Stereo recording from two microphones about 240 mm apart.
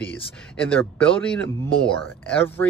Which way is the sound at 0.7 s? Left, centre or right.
Centre.